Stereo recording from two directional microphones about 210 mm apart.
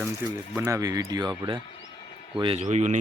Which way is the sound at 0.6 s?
15° right (ahead or behind).